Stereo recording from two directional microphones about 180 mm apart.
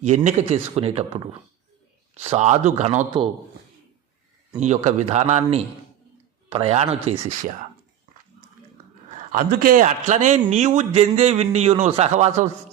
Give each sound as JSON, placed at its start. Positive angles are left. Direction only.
{"t": 0.0, "sound": "a man's voice", "side_deg": -40}
{"t": 4.6, "sound": "a man's voice", "side_deg": -40}
{"t": 9.3, "sound": "a man's voice", "side_deg": -50}